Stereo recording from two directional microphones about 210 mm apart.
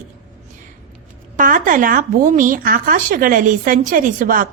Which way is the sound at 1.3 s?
40° right (ahead or behind).